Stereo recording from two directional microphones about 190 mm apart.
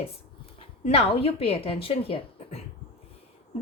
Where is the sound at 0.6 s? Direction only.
30° left (ahead or behind).